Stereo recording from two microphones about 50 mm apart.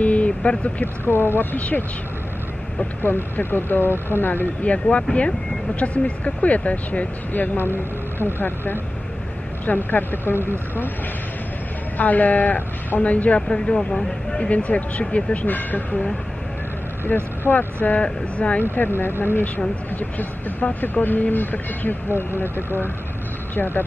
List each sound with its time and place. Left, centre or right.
0.0 s vehicle: left
1.0 s speech: left
3.0 s speech: left
5.1 s speech: left
7.5 s speech: left
12.0 s speech: left
13.0 s speech: left
18.0 s speech: left
18.6 s speech: left
20.0 s speech: left
23.5 s speech: left